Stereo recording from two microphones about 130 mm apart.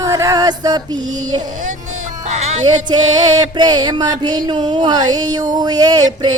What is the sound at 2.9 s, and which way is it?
Music, 35° right (ahead or behind).